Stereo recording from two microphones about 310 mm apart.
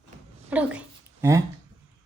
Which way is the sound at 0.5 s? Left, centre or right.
Centre.